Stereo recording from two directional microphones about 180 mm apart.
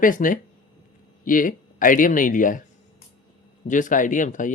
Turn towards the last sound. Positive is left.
turn(degrees=45)  # may be behind; listen again after turning